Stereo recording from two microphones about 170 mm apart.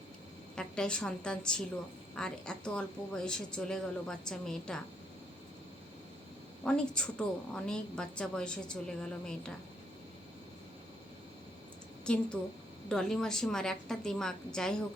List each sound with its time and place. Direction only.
0.5 s a woman's voice: 5° left (ahead or behind)
6.7 s a woman's voice: 5° left (ahead or behind)
12.0 s a woman's voice: 5° left (ahead or behind)